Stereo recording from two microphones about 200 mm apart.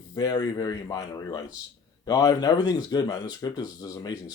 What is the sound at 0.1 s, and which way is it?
Speech, 20° left (ahead or behind).